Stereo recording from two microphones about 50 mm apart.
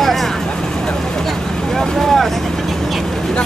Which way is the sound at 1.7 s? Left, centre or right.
Centre.